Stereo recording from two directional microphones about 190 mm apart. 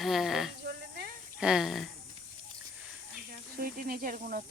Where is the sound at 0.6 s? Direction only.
55° right (ahead or behind).